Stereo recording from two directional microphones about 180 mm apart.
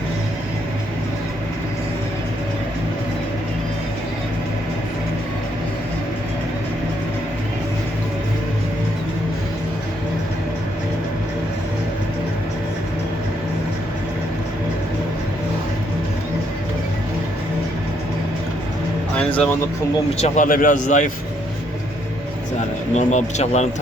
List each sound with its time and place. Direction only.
20.1 s a man's voice: 40° left (ahead or behind)
23.0 s speech: 40° left (ahead or behind)